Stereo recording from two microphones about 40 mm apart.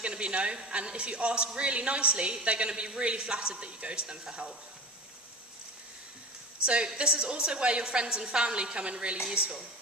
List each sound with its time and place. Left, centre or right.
0.0 s a woman's voice: right
6.7 s a woman's voice: right